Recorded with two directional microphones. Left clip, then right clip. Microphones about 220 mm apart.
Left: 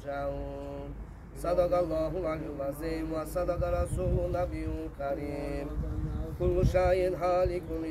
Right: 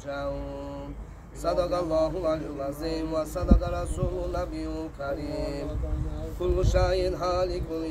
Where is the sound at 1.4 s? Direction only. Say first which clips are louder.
Right 1 dB; centre (ahead or behind).